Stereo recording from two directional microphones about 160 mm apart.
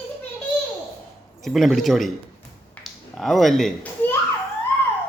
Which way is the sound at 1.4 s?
Centre (ahead or behind).